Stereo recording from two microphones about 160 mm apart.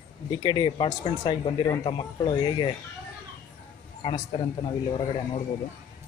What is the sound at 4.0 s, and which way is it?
A man's voice, 35° left (ahead or behind).